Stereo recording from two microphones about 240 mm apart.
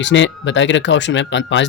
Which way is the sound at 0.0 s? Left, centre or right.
Left.